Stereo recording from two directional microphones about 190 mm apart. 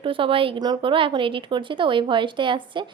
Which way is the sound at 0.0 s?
30° right (ahead or behind).